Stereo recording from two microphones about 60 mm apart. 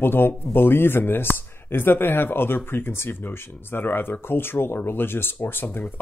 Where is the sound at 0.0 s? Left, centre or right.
Left.